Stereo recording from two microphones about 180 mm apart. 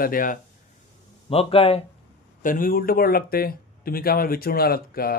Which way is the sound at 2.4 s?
50° left (ahead or behind).